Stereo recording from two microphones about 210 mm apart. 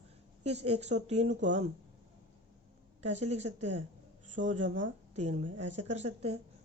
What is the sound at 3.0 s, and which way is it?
Speech, 35° right (ahead or behind).